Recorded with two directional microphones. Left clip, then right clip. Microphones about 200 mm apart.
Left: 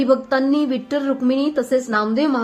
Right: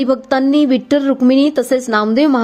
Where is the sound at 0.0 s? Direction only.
35° right (ahead or behind).